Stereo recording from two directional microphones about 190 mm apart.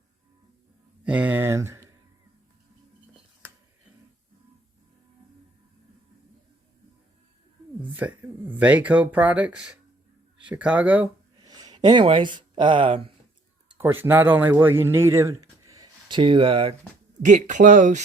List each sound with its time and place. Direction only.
1.0 s speech: 5° right (ahead or behind)
7.8 s speech: 10° right (ahead or behind)
11.4 s speech: 20° right (ahead or behind)
13.7 s speech: 10° right (ahead or behind); by 16.7 s 30° right (ahead or behind)
17.2 s speech: 40° right (ahead or behind)